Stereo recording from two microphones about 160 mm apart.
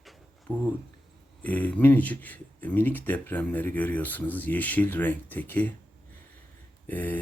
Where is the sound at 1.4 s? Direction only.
10° left (ahead or behind).